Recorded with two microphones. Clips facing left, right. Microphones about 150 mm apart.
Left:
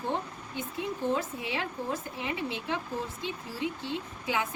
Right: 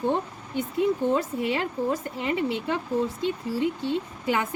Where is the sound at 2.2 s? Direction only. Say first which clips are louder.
Right 7 dB; 60° right (ahead or behind).